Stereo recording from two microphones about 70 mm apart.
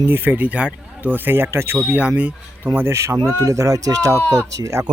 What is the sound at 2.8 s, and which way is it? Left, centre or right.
Speech, right.